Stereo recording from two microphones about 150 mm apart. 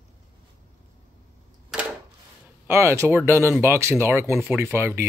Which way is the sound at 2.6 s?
15° right (ahead or behind).